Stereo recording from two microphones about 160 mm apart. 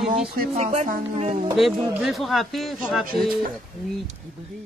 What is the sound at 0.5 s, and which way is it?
Speech, 45° right (ahead or behind).